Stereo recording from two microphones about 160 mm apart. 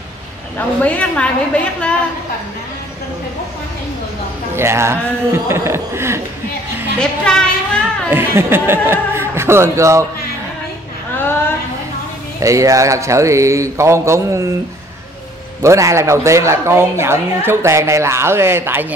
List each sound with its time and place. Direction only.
0.6 s a woman's voice: 10° left (ahead or behind)
4.6 s speech: 15° right (ahead or behind)
7.0 s a woman's voice: 5° left (ahead or behind)
8.1 s speech: 15° right (ahead or behind)
11.1 s a sound: 15° left (ahead or behind)
12.4 s a man's voice: 20° right (ahead or behind)
15.6 s speech: 20° right (ahead or behind)